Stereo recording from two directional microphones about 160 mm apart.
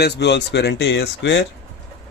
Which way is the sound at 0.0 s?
90° left.